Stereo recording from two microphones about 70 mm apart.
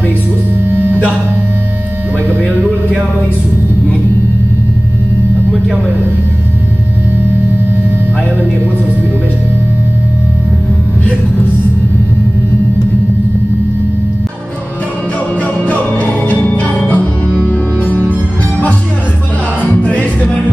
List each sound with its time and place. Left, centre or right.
15.6 s music: left
19.6 s music: left